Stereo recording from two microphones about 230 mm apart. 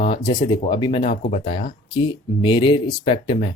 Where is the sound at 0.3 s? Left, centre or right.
Centre.